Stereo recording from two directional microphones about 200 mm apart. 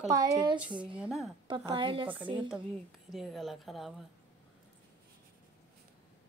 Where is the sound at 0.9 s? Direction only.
5° right (ahead or behind).